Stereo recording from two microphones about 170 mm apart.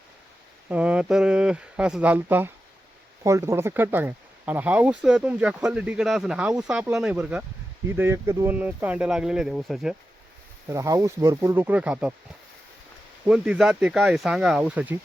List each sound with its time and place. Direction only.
0.7 s speech: 5° right (ahead or behind)
10.7 s speech: 20° right (ahead or behind)
13.2 s speech: 5° right (ahead or behind)